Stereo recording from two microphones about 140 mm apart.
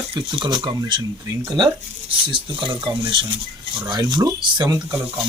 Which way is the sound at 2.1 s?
35° right (ahead or behind).